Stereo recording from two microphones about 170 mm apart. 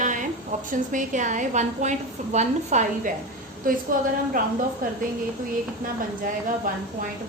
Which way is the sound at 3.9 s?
55° right (ahead or behind).